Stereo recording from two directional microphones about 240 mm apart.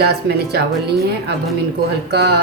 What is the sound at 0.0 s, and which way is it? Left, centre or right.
A woman's voice, right.